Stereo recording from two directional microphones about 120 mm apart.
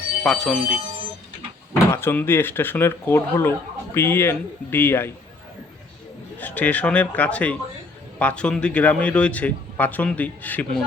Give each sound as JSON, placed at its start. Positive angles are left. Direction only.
{"t": 0.2, "sound": "speech", "side_deg": 0}
{"t": 1.9, "sound": "speech", "side_deg": 20}
{"t": 6.4, "sound": "speech", "side_deg": 15}